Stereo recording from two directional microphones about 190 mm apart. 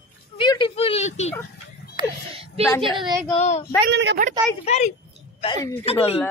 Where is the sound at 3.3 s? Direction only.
35° left (ahead or behind).